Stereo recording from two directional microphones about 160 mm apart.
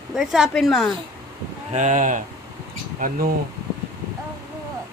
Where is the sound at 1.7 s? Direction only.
50° right (ahead or behind).